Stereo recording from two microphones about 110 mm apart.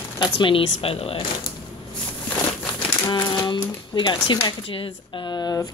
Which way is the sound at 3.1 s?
35° left (ahead or behind).